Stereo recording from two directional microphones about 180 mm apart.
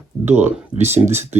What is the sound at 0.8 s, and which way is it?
Speech, 15° right (ahead or behind).